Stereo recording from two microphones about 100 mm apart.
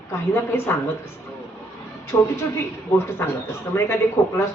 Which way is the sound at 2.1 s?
30° left (ahead or behind).